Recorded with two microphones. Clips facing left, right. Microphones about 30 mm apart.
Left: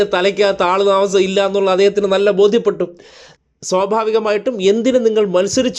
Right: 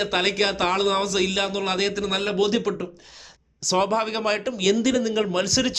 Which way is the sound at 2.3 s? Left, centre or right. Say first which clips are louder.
Left 10 dB; centre.